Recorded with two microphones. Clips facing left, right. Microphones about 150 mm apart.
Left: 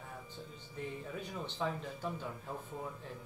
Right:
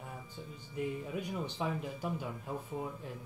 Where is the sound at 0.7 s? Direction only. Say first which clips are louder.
Right 5 dB; 15° right (ahead or behind).